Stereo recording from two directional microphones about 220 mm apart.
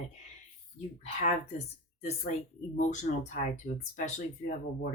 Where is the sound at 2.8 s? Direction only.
35° left (ahead or behind).